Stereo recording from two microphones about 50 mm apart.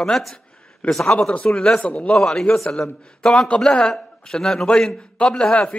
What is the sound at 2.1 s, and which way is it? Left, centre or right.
A man's voice, centre.